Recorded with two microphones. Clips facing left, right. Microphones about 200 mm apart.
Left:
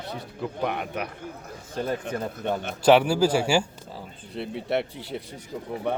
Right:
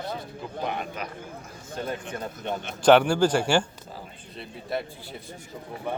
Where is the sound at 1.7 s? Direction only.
40° left (ahead or behind).